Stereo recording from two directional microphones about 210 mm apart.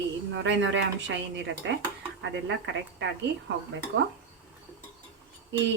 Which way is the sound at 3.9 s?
60° right (ahead or behind).